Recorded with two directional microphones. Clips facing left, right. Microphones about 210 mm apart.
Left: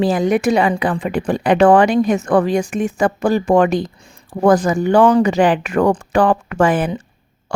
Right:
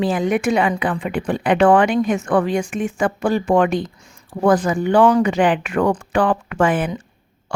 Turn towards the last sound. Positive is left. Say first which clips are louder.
# left 3 dB
turn(degrees=40)  # may be behind; listen again after turning